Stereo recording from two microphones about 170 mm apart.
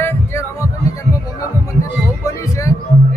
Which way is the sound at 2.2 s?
20° left (ahead or behind).